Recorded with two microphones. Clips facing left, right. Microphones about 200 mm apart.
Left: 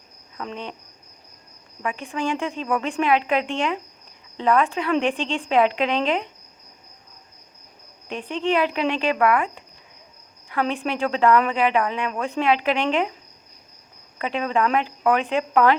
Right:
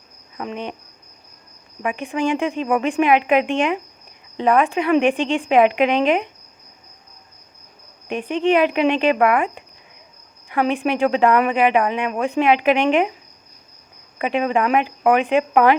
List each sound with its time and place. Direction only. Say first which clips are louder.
0.3 s speech: right 4 dB; 15° right (ahead or behind)
1.8 s speech: right 5 dB; 15° right (ahead or behind)
8.0 s speech: right 5 dB; 15° right (ahead or behind)
14.2 s speech: right 3 dB; 15° right (ahead or behind)